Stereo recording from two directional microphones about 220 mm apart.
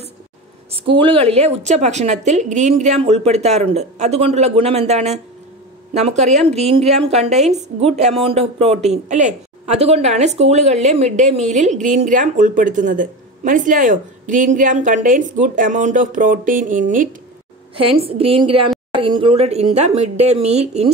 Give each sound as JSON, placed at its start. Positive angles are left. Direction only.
{"t": 0.7, "sound": "a woman's voice", "side_deg": -25}
{"t": 18.0, "sound": "a woman's voice", "side_deg": -25}